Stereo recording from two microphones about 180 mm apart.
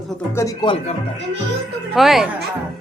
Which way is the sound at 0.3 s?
20° left (ahead or behind).